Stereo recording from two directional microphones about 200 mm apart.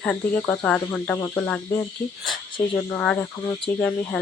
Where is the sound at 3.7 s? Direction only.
10° left (ahead or behind).